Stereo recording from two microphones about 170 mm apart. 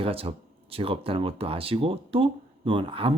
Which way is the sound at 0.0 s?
35° right (ahead or behind).